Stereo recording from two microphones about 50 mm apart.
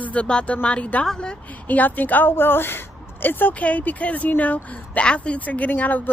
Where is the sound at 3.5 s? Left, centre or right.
Left.